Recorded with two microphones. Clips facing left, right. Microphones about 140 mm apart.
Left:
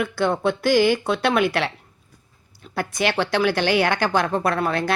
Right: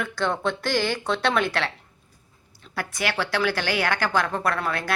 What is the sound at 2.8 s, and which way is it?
A woman's voice, 20° left (ahead or behind).